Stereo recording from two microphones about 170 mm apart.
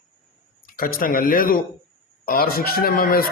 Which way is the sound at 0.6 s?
55° left (ahead or behind).